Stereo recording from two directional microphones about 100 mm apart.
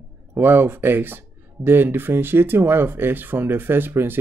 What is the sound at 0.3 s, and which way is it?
Speech, 20° right (ahead or behind).